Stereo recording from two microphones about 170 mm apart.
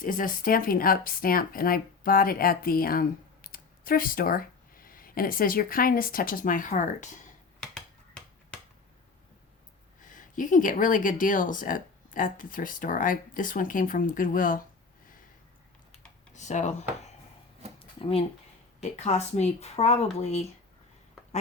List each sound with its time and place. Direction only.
0.0 s speech: 55° left (ahead or behind)
7.6 s finger snapping: 5° left (ahead or behind)
10.0 s speech: 50° left (ahead or behind)
16.3 s speech: 45° left (ahead or behind)
18.0 s speech: 35° left (ahead or behind)